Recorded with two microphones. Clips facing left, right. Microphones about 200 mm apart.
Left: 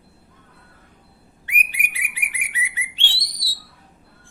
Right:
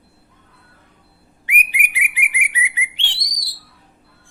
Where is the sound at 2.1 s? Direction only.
15° right (ahead or behind).